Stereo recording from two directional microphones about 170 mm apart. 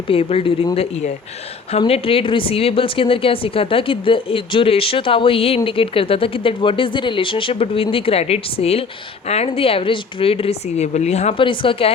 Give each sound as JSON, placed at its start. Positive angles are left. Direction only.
{"t": 0.1, "sound": "speech", "side_deg": 35}